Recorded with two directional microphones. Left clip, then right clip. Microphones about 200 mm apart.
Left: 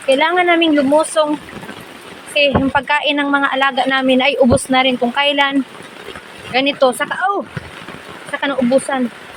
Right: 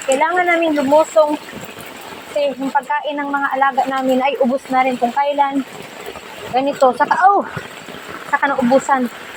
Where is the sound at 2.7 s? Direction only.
55° left (ahead or behind).